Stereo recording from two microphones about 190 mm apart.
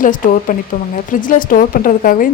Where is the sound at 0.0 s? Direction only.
45° left (ahead or behind).